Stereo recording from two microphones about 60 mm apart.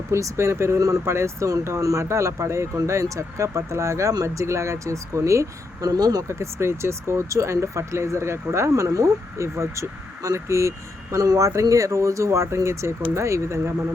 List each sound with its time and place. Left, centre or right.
0.1 s speech: right
4.1 s speech: right
5.8 s speech: right
6.2 s speech: right